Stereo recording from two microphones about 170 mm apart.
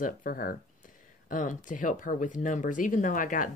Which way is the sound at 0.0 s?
55° left (ahead or behind).